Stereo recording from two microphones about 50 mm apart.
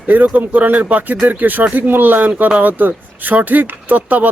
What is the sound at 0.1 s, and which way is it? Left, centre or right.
Speech, right.